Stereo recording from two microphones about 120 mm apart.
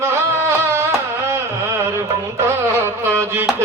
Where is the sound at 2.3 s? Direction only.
20° right (ahead or behind).